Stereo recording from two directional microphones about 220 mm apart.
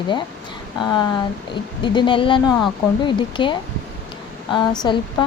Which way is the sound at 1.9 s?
20° left (ahead or behind).